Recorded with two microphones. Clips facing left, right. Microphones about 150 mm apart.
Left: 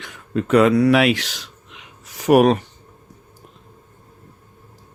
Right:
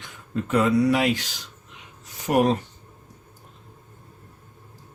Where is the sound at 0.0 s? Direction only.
85° left.